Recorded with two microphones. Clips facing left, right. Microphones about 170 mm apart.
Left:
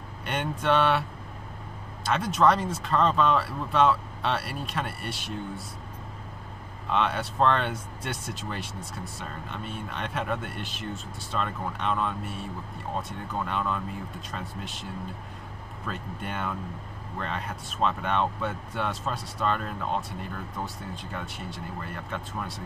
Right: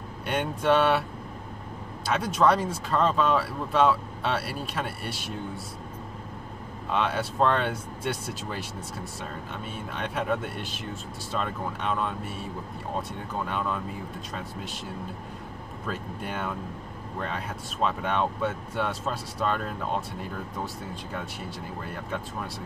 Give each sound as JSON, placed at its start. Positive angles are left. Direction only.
{"t": 0.2, "sound": "speech", "side_deg": 0}
{"t": 2.0, "sound": "speech", "side_deg": 0}
{"t": 6.9, "sound": "speech", "side_deg": 0}
{"t": 13.5, "sound": "speech", "side_deg": -5}
{"t": 15.9, "sound": "speech", "side_deg": 0}